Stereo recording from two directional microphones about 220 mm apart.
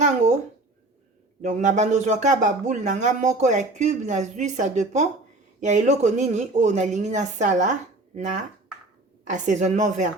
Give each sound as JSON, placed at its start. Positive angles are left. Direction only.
{"t": 1.4, "sound": "speech", "side_deg": -35}